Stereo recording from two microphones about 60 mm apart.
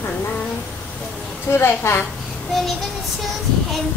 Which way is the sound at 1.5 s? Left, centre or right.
Left.